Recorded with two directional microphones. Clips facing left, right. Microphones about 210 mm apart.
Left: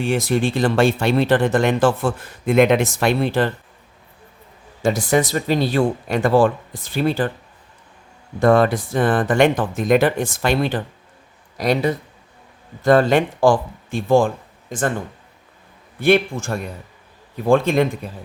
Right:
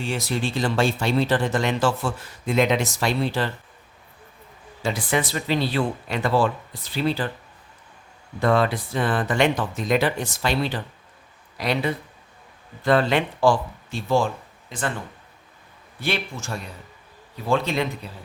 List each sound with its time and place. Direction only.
0.0 s speech: 55° left (ahead or behind)
4.8 s speech: 45° left (ahead or behind)
8.4 s speech: 45° left (ahead or behind)